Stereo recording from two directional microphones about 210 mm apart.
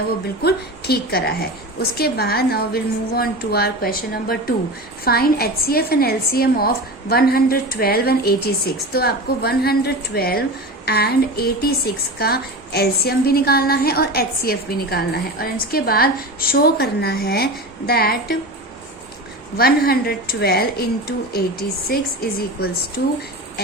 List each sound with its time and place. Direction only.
0.4 s a woman's voice: 50° left (ahead or behind)
19.5 s a woman's voice: 45° left (ahead or behind)